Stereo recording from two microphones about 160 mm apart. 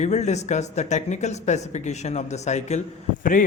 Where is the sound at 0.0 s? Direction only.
45° left (ahead or behind).